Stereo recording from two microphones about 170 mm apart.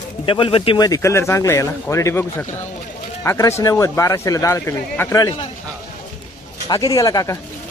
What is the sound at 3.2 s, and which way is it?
Speech, 15° left (ahead or behind).